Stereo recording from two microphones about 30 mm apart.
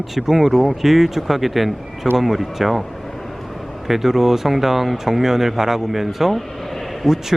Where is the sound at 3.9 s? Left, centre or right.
Centre.